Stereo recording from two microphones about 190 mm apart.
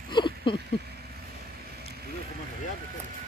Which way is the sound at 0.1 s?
25° left (ahead or behind).